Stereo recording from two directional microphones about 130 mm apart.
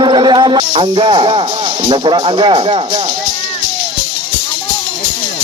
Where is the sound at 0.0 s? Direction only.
35° right (ahead or behind).